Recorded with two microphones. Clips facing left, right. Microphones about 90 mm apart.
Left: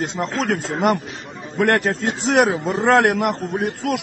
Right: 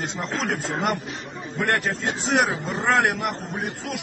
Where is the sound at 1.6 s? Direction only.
55° left (ahead or behind).